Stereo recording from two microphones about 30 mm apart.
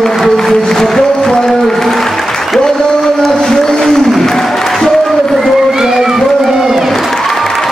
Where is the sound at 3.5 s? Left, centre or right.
Centre.